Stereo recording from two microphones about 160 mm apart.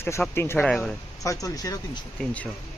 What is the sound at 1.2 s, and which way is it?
Speech, 20° left (ahead or behind).